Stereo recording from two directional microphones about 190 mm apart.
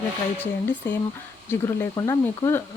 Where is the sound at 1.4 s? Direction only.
15° left (ahead or behind).